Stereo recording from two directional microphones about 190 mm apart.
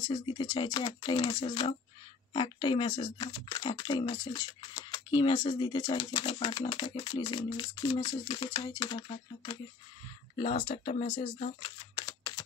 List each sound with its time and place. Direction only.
0.1 s speech: 25° left (ahead or behind)
11.9 s camera: 25° left (ahead or behind)